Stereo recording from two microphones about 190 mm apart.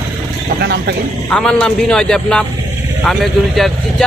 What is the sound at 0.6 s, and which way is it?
Speech, 65° right (ahead or behind).